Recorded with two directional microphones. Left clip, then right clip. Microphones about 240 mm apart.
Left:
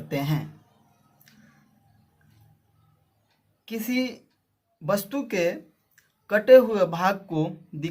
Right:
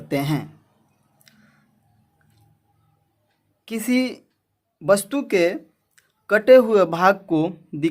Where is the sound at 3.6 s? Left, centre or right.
Right.